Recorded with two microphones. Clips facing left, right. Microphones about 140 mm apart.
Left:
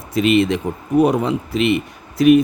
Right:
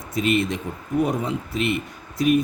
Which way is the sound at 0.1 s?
85° left.